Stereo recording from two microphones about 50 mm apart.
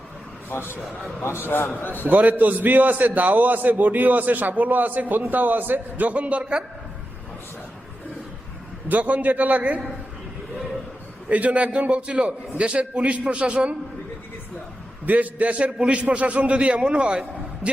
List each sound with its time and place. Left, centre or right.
0.5 s a man's voice: left
2.0 s a man's voice: right
8.9 s a man's voice: right
11.3 s a man's voice: right
15.0 s a man's voice: right